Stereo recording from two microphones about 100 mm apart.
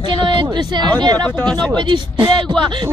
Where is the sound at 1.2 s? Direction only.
10° left (ahead or behind).